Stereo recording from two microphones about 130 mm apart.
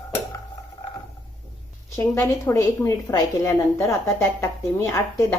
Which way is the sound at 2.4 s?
20° left (ahead or behind).